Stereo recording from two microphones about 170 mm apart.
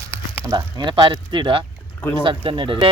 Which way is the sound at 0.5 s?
25° right (ahead or behind).